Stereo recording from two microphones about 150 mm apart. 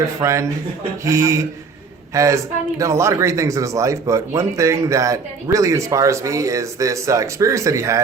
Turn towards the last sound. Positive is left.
turn(degrees=-20)  # may be behind; listen again after turning